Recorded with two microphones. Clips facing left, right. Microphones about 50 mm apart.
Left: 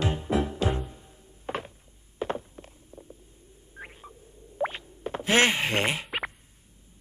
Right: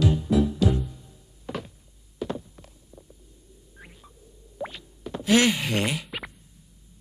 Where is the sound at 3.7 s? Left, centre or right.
Left.